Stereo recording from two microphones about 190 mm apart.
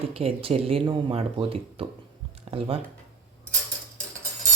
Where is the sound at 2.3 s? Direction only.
30° right (ahead or behind).